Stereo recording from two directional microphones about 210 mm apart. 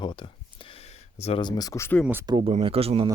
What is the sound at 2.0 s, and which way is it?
Speech, 10° right (ahead or behind).